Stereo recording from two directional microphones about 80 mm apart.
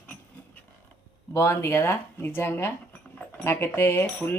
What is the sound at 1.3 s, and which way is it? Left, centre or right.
Speech, left.